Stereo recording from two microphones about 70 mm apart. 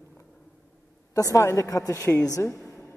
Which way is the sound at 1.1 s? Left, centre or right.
Left.